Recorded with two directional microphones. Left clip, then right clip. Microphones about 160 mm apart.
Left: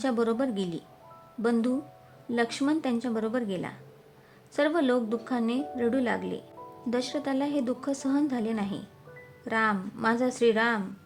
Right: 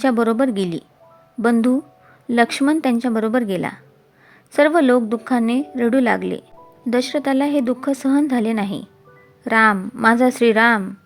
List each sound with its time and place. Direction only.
0.0 s speech: 40° right (ahead or behind)
2.3 s speech: 45° right (ahead or behind)